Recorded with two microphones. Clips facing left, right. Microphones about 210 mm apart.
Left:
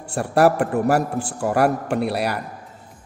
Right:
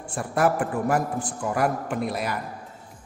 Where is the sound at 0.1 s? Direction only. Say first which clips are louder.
Left 6 dB; 70° left (ahead or behind).